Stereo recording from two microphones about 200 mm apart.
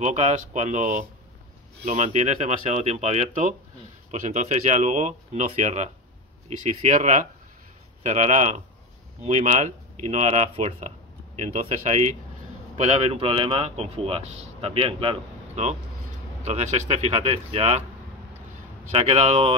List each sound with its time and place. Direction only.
0.0 s speech: 35° right (ahead or behind)
6.9 s a man's voice: 40° right (ahead or behind)
18.9 s speech: 30° right (ahead or behind)